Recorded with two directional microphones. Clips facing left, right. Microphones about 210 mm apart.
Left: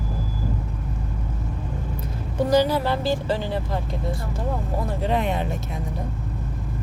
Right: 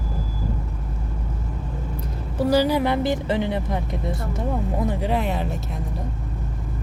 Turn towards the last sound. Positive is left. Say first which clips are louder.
# even
turn(degrees=0)  # may be behind; listen again after turning